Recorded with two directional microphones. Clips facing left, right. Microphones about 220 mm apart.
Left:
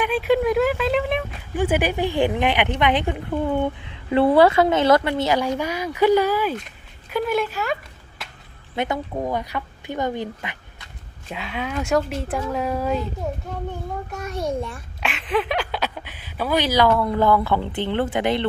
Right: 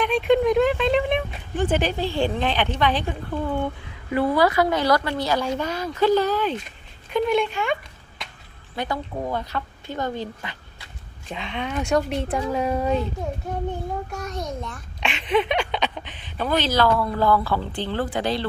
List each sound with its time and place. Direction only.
0.0 s a child's voice: 5° left (ahead or behind)
8.7 s a child's voice: 20° left (ahead or behind)
11.3 s speech: 5° left (ahead or behind)
14.1 s a child's voice: 5° left (ahead or behind)